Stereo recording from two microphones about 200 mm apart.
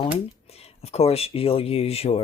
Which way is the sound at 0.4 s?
30° left (ahead or behind).